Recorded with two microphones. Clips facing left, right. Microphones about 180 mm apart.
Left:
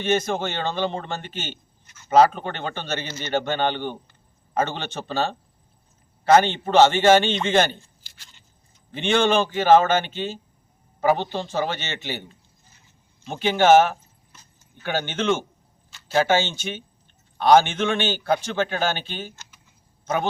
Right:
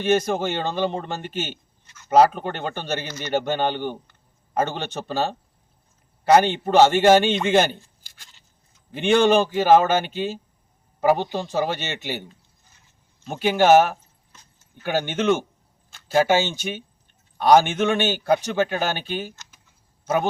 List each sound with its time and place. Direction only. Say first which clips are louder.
0.0 s a man's voice: right 2 dB; 10° right (ahead or behind)
7.7 s a sound: right 1 dB; 50° right (ahead or behind)
8.9 s a man's voice: right 3 dB; 10° right (ahead or behind)
13.2 s a man's voice: even; 10° right (ahead or behind)